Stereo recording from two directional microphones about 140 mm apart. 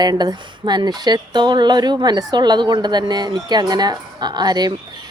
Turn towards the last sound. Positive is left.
turn(degrees=-30)  # may be behind; listen again after turning